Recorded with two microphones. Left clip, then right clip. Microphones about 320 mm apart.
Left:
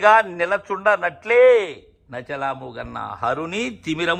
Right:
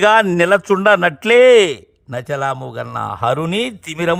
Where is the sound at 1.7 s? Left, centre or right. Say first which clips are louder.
Right 8 dB; right.